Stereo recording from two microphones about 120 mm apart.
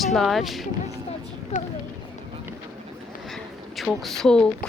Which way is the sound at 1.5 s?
65° left (ahead or behind).